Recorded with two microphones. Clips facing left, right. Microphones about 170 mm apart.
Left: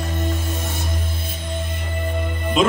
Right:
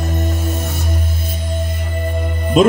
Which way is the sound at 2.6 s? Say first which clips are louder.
Right 7 dB; 45° right (ahead or behind).